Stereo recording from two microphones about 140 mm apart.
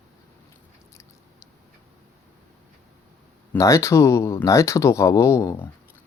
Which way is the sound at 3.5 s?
20° left (ahead or behind).